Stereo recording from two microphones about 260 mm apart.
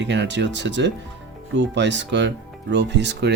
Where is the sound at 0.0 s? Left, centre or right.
Right.